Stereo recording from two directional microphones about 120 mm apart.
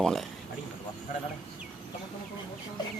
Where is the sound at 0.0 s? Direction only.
Centre (ahead or behind).